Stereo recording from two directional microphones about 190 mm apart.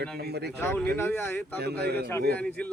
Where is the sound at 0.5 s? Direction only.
10° left (ahead or behind).